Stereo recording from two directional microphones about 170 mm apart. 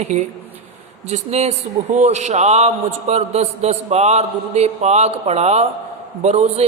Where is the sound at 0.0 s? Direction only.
45° right (ahead or behind).